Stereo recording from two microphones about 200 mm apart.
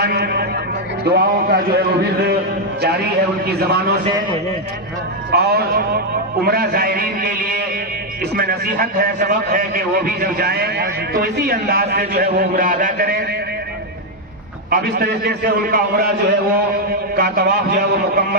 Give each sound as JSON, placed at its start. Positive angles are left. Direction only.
{"t": 0.0, "sound": "a man's voice", "side_deg": -55}
{"t": 3.4, "sound": "a man's voice", "side_deg": -55}
{"t": 5.3, "sound": "a man's voice", "side_deg": -50}
{"t": 14.7, "sound": "a man's voice", "side_deg": -50}